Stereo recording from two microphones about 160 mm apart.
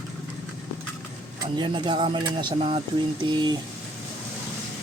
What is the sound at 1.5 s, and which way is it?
Speech, 30° right (ahead or behind).